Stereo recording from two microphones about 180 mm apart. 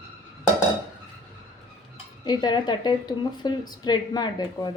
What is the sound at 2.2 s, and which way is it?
A woman's voice, 25° left (ahead or behind).